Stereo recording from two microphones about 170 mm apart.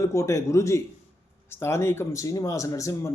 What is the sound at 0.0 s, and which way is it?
Speech, 15° left (ahead or behind).